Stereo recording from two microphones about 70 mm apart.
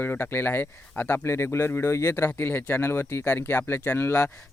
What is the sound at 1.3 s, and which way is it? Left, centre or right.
Speech, left.